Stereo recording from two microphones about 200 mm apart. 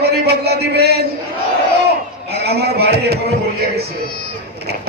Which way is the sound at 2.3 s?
55° right (ahead or behind).